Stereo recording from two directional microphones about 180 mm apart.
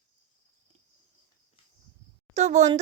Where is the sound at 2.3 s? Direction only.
40° right (ahead or behind).